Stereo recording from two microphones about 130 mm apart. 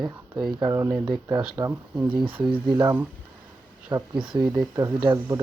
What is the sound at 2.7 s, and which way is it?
Speech, 30° right (ahead or behind).